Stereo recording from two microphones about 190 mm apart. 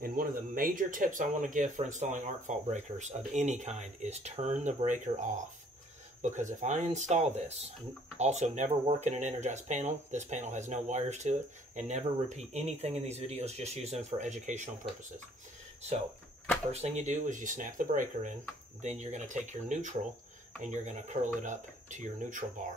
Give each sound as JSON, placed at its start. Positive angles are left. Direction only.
{"t": 0.0, "sound": "speech", "side_deg": -50}
{"t": 6.6, "sound": "speech", "side_deg": -40}
{"t": 16.7, "sound": "speech", "side_deg": -40}